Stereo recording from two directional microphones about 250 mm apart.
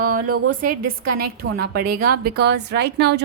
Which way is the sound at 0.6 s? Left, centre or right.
Right.